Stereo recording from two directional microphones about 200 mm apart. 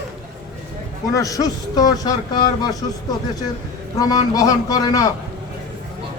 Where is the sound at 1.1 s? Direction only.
15° left (ahead or behind).